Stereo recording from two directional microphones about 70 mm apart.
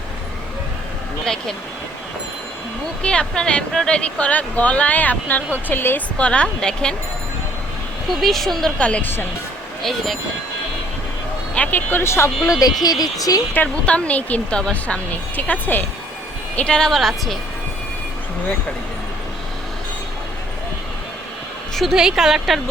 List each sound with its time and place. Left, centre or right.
1.2 s speech: centre
3.0 s speech: centre; by 6.0 s left
6.1 s speech: centre
8.1 s speech: centre
8.8 s speech: centre
11.5 s speech: centre
11.9 s speech: left
12.5 s speech: left
12.8 s speech: left
13.5 s speech: left
16.6 s speech: centre
21.8 s a woman's voice: centre